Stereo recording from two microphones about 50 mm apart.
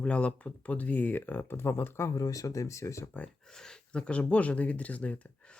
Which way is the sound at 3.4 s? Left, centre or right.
Centre.